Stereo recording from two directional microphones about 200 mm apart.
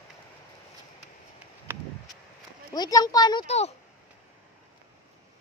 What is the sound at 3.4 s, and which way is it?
Speech, 35° left (ahead or behind).